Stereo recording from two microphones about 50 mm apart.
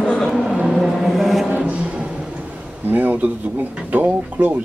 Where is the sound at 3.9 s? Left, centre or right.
Right.